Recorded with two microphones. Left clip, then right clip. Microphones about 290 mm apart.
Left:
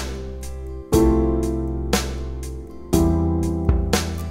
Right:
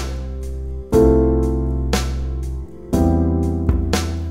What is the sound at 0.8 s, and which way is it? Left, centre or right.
Music, centre.